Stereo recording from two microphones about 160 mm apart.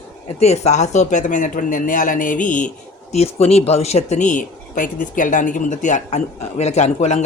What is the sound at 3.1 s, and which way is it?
Speech, 40° left (ahead or behind).